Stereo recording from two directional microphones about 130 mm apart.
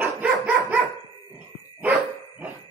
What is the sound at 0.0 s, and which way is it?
Dog, 15° right (ahead or behind).